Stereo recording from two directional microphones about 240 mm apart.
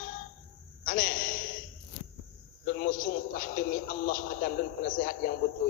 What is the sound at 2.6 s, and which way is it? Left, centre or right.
A man's voice, left.